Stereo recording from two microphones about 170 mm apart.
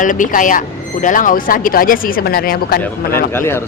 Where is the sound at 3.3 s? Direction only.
15° left (ahead or behind).